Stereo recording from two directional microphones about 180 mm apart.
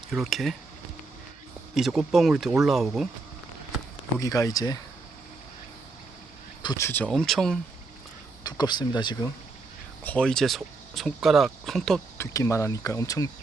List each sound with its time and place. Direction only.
0.1 s speech: centre (ahead or behind)
1.7 s speech: centre (ahead or behind)
4.2 s speech: 20° left (ahead or behind)
6.6 s speech: 20° left (ahead or behind); by 7.6 s centre (ahead or behind)
8.4 s speech: 25° left (ahead or behind)
10.0 s speech: 5° left (ahead or behind)
12.1 s speech: 15° left (ahead or behind)